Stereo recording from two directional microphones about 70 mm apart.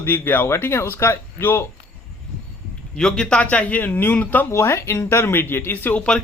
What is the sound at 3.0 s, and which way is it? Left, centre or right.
Speech, centre.